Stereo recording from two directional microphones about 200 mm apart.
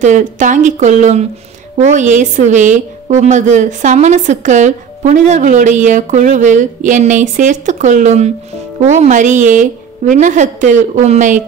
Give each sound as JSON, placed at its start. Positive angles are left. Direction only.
{"t": 0.0, "sound": "a woman's voice", "side_deg": -40}